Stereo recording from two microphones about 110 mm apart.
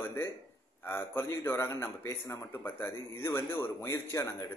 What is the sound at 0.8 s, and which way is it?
A man's voice, 20° left (ahead or behind).